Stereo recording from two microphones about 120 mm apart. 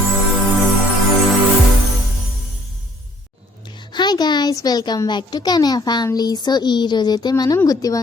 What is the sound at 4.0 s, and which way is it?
A child's voice, 35° left (ahead or behind).